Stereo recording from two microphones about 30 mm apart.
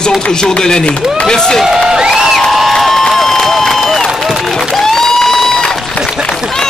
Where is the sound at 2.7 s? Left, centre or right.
Centre.